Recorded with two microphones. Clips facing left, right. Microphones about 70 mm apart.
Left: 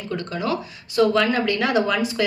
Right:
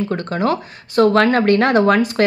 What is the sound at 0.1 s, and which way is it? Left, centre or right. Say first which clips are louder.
Speech: right 6 dB; right.